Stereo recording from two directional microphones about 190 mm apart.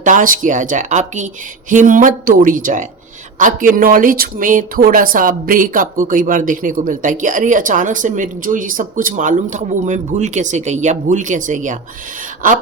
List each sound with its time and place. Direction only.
0.0 s speech: 45° right (ahead or behind)